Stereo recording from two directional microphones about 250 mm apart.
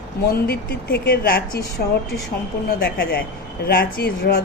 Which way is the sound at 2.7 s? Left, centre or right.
Left.